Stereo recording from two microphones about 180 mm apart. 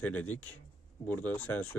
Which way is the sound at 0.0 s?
10° left (ahead or behind).